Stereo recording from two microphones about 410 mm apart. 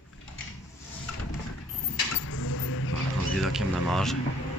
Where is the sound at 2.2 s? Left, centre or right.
Left.